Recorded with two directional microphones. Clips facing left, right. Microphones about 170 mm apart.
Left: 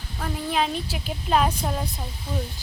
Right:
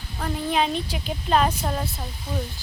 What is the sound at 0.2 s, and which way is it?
Speech, centre (ahead or behind).